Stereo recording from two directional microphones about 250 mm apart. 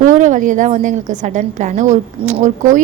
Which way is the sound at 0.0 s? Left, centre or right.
Right.